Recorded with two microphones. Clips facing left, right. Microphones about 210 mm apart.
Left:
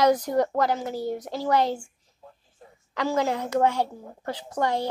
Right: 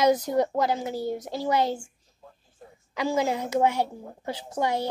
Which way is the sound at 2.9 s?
15° right (ahead or behind).